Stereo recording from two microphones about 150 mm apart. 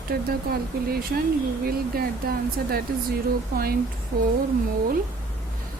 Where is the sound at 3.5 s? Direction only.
80° right.